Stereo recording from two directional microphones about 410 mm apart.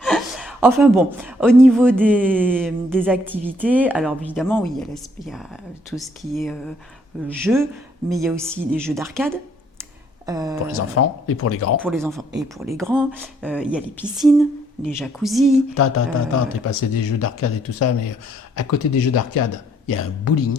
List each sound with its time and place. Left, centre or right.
0.0 s a woman's voice: centre
10.8 s speech: left
11.8 s a woman's voice: centre
15.7 s speech: left